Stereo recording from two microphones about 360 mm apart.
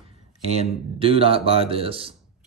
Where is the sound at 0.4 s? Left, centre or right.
Centre.